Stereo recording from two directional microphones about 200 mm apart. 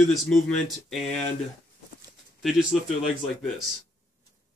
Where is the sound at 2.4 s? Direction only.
Centre (ahead or behind).